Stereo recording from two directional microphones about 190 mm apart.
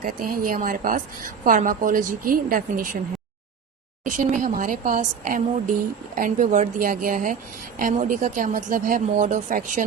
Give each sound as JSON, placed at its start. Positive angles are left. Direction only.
{"t": 0.0, "sound": "a woman's voice", "side_deg": -45}
{"t": 4.0, "sound": "a woman's voice", "side_deg": -45}